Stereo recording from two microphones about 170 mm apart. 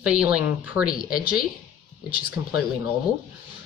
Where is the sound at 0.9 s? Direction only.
60° left (ahead or behind).